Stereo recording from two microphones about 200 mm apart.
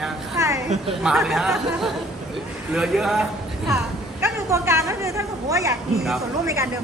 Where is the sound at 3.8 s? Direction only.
15° right (ahead or behind).